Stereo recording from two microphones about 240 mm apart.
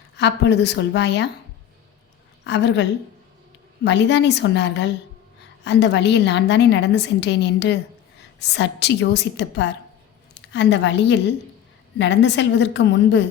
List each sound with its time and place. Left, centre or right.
0.2 s a woman's voice: left
2.4 s a woman's voice: left
3.8 s a woman's voice: left